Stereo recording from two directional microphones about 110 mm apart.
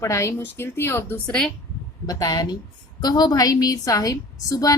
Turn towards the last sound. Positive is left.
turn(degrees=30)  # may be behind; listen again after turning